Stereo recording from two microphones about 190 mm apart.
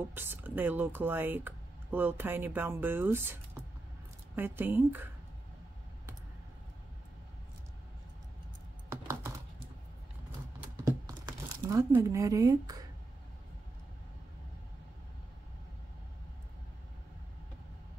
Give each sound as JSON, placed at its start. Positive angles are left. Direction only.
{"t": 0.1, "sound": "speech", "side_deg": -10}
{"t": 4.4, "sound": "speech", "side_deg": -10}
{"t": 8.8, "sound": "computer keyboard", "side_deg": -15}
{"t": 10.6, "sound": "computer keyboard", "side_deg": -15}